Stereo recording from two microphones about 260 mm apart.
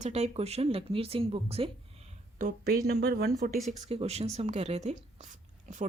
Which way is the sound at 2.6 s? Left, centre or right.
Right.